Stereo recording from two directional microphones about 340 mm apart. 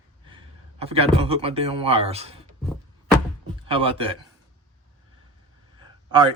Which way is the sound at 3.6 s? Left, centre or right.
Centre.